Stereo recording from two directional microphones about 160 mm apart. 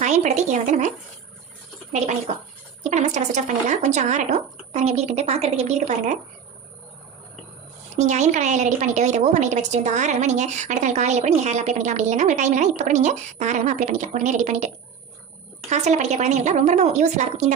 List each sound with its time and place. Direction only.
0.0 s a sound: 45° right (ahead or behind)
1.9 s a woman's voice: 45° right (ahead or behind)
7.9 s a woman's voice: 45° right (ahead or behind)
15.7 s a woman's voice: 45° right (ahead or behind)